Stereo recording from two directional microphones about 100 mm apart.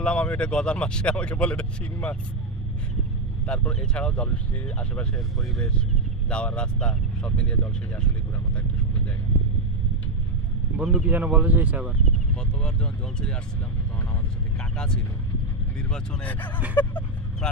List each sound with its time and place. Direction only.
0.0 s speech: 10° left (ahead or behind)
3.4 s speech: 10° left (ahead or behind)
10.8 s speech: 10° right (ahead or behind)
12.3 s speech: 10° left (ahead or behind)
14.8 s speech: 5° left (ahead or behind)